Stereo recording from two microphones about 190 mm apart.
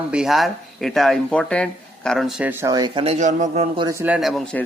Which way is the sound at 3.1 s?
40° right (ahead or behind).